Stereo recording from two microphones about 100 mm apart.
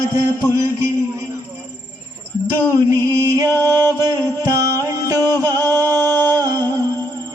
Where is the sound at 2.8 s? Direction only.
40° right (ahead or behind).